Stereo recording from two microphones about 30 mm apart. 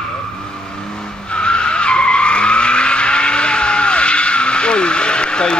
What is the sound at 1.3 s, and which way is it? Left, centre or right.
Vehicle, left.